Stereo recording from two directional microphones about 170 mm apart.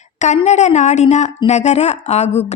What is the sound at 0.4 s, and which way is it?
A woman's voice, 45° left (ahead or behind).